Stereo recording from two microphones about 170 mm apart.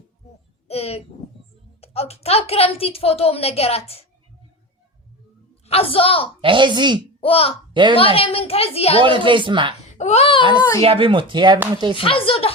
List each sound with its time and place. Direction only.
0.7 s a child's voice: 35° left (ahead or behind)
5.6 s a woman's voice: 35° left (ahead or behind)
6.4 s speech: 30° right (ahead or behind)
7.2 s a woman's voice: 35° left (ahead or behind)
7.7 s a woman's voice: 30° right (ahead or behind)
7.9 s a woman's voice: 35° left (ahead or behind)
9.0 s speech: 30° right (ahead or behind)
9.8 s a child's voice: 40° left (ahead or behind)
10.6 s speech: 20° left (ahead or behind)
10.8 s speech: 35° right (ahead or behind)
11.9 s a woman's voice: 30° left (ahead or behind)